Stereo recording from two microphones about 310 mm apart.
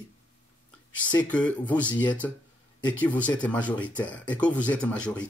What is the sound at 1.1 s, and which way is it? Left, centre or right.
Speech, centre.